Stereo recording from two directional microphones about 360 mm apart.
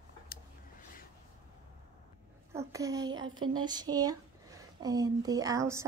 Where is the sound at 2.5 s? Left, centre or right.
Centre.